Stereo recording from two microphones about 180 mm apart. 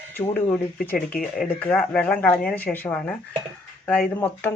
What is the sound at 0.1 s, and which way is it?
Speech, 10° left (ahead or behind).